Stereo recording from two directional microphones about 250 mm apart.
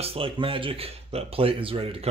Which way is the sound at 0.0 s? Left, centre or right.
Right.